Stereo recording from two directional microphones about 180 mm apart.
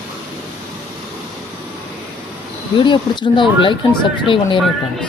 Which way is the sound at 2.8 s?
25° left (ahead or behind).